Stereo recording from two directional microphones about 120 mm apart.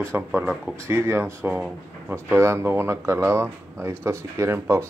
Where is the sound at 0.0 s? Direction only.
15° right (ahead or behind).